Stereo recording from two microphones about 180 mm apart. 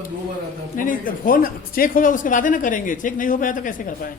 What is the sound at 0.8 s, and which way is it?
Speech, 50° left (ahead or behind).